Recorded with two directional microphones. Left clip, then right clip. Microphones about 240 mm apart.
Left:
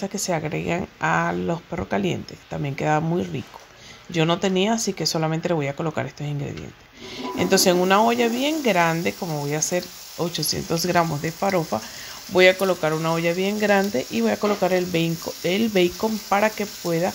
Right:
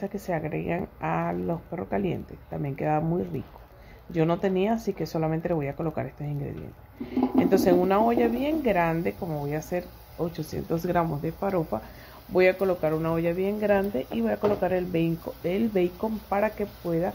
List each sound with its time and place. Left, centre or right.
0.1 s speech: left